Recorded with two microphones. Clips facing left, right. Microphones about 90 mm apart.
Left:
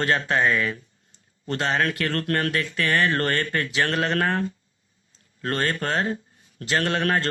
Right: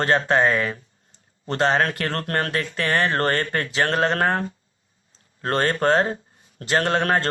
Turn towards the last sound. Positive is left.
turn(degrees=-30)  # may be behind; listen again after turning